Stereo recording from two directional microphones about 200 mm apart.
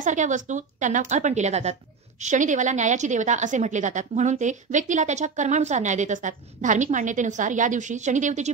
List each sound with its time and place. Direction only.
0.0 s a woman's voice: 40° right (ahead or behind)